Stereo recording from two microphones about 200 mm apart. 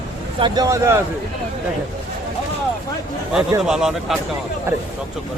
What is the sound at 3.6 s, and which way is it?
Speech, 5° right (ahead or behind).